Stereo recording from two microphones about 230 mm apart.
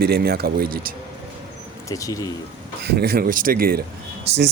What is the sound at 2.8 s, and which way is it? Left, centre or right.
Speech, right.